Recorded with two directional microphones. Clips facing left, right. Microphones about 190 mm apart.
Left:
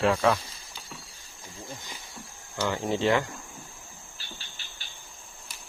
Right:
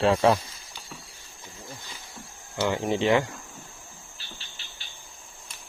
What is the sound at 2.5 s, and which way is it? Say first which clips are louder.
Speech: right 3 dB; 15° right (ahead or behind).